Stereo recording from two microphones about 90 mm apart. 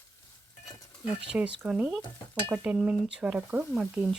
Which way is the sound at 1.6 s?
10° right (ahead or behind).